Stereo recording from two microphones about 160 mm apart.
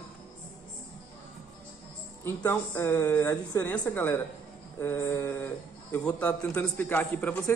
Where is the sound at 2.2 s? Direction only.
15° left (ahead or behind).